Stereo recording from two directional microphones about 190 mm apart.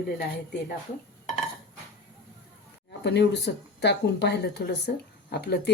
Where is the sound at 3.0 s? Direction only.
60° left (ahead or behind).